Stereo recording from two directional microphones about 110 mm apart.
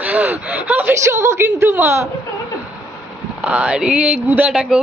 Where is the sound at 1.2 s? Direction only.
25° right (ahead or behind).